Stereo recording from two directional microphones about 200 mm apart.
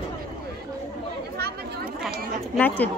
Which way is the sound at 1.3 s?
50° right (ahead or behind).